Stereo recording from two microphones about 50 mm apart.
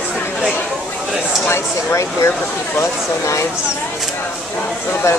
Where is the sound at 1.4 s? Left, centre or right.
Left.